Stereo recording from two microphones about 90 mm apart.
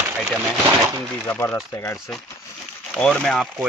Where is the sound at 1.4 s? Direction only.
30° left (ahead or behind).